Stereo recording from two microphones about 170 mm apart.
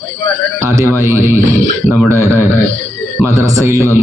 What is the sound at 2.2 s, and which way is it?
Speech, 15° left (ahead or behind).